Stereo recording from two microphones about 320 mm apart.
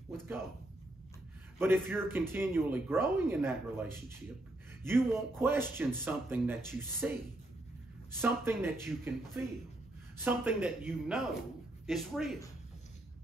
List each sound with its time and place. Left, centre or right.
1.6 s speech: centre
8.2 s speech: centre